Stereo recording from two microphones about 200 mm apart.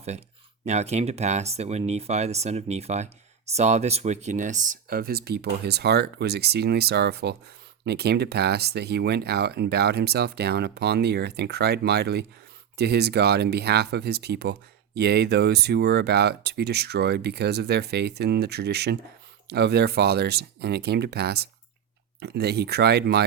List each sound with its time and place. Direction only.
0.6 s speech: 35° right (ahead or behind); by 23.2 s 55° right (ahead or behind)